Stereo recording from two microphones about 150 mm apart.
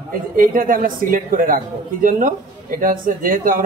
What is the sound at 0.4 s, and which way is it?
A man's voice, 65° right (ahead or behind).